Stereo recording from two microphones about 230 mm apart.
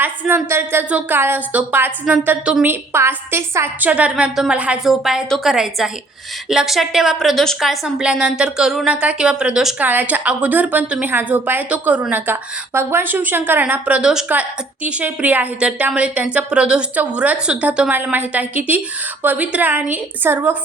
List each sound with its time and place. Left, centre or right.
0.0 s a woman's voice: centre